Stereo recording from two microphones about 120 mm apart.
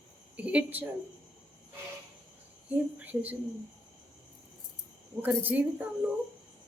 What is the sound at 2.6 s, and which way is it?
Speech, 15° right (ahead or behind).